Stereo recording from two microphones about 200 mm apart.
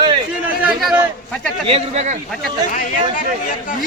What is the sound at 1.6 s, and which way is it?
Speech, 30° right (ahead or behind).